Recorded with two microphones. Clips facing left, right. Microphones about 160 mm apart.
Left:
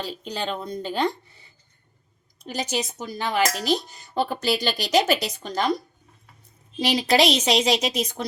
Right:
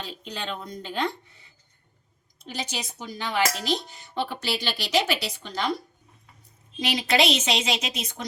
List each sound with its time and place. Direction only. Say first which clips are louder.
0.0 s a woman's voice: left 5 dB; 35° left (ahead or behind)
2.4 s a woman's voice: left 6 dB; 45° left (ahead or behind)